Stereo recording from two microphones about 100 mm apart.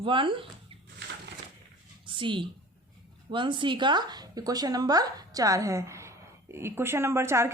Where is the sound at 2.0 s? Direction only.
55° right (ahead or behind).